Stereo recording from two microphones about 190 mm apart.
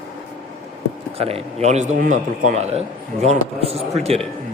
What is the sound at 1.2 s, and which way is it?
A man's voice, 35° right (ahead or behind).